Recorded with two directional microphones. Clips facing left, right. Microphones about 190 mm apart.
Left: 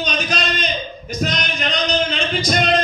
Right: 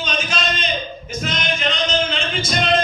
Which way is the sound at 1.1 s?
40° left (ahead or behind).